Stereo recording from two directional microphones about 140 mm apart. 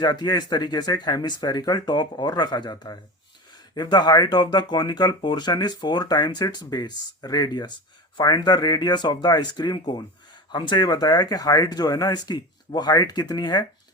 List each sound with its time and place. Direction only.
0.0 s speech: 30° left (ahead or behind)